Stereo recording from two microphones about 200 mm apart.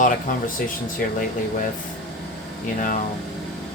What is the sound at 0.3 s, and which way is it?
Speech, 45° left (ahead or behind).